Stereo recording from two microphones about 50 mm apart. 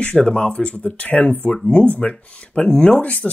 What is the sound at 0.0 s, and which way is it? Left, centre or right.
Speech, centre.